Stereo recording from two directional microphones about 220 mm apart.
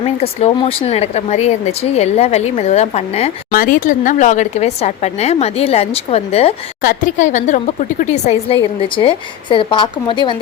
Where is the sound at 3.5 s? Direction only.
40° left (ahead or behind).